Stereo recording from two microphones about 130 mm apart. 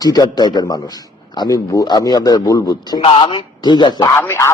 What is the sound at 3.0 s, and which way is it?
A man's voice, 45° left (ahead or behind).